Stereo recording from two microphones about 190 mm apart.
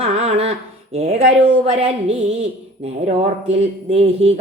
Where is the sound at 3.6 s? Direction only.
35° right (ahead or behind).